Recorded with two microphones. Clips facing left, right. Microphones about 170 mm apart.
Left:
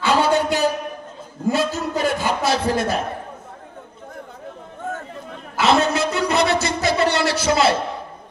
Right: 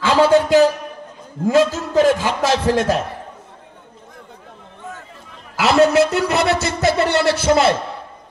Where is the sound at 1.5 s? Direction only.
90° right.